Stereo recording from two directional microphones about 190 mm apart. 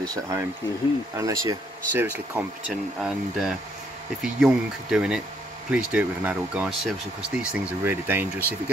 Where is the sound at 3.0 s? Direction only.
5° right (ahead or behind).